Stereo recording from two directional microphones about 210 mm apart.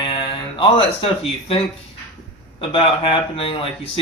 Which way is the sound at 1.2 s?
25° left (ahead or behind).